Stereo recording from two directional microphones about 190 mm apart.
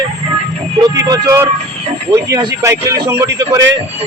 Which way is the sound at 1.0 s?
20° right (ahead or behind).